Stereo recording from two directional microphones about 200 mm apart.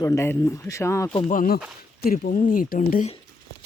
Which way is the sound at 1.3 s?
45° left (ahead or behind).